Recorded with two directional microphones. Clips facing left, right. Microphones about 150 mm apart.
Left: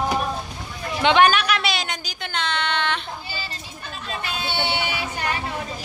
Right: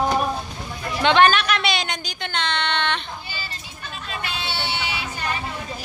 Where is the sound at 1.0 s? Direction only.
10° left (ahead or behind).